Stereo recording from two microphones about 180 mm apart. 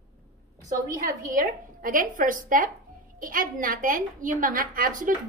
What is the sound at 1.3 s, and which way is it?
A woman's voice, 50° right (ahead or behind).